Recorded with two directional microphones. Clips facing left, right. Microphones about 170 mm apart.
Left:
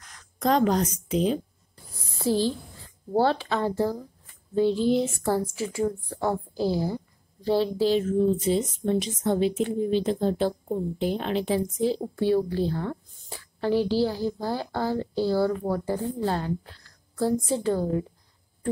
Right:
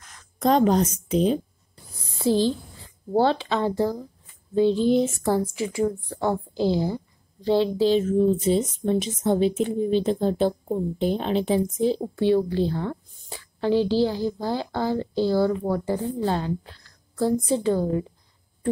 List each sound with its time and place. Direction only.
0.0 s a woman's voice: 25° right (ahead or behind)